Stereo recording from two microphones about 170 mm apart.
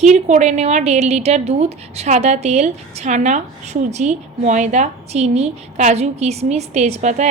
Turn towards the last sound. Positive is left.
turn(degrees=-45)  # may be behind; listen again after turning